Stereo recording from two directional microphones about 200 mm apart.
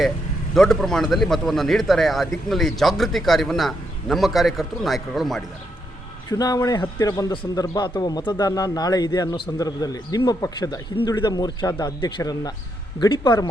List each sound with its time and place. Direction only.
0.5 s speech: 5° left (ahead or behind)
6.3 s a man's voice: 20° left (ahead or behind)